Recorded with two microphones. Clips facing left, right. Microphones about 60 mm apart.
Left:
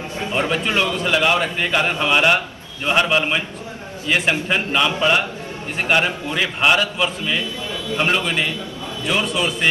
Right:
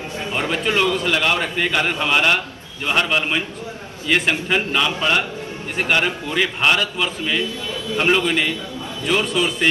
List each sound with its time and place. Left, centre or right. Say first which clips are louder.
0.4 s a man's voice: even; centre
9.0 s a man's voice: right 1 dB; centre